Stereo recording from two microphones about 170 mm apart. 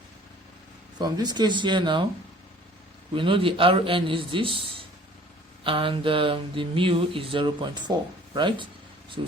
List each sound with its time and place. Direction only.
0.9 s speech: 25° right (ahead or behind)
3.2 s speech: 30° right (ahead or behind)